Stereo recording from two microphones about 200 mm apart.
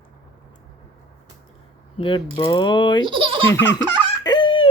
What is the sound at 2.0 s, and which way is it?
Speech, 25° left (ahead or behind).